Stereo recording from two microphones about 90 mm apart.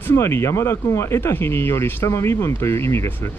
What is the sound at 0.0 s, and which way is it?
Speech, 30° left (ahead or behind).